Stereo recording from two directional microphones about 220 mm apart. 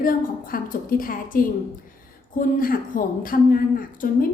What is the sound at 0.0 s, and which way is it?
A woman's voice, 40° left (ahead or behind).